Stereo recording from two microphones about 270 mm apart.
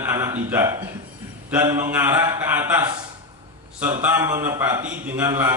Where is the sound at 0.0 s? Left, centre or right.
Centre.